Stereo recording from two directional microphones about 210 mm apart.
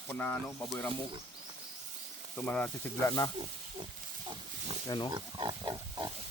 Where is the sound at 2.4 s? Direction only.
5° left (ahead or behind).